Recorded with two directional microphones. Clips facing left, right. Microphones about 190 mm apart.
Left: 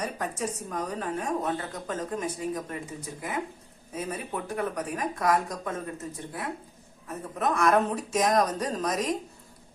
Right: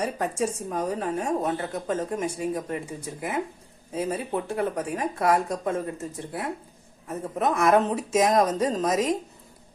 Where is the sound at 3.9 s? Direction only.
30° right (ahead or behind).